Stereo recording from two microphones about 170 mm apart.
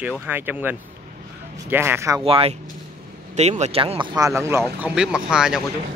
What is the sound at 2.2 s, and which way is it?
Speech, 35° right (ahead or behind).